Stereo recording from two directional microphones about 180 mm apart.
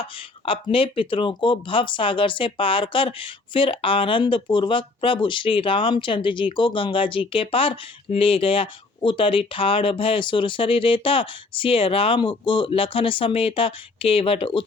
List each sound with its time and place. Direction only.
0.0 s speech: 30° left (ahead or behind)